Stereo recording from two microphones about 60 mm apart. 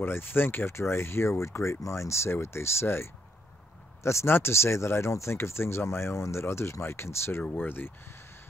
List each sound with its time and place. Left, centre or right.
0.0 s speech: left
7.6 s speech: left